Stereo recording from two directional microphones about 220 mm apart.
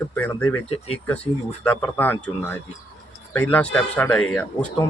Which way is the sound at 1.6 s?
5° left (ahead or behind).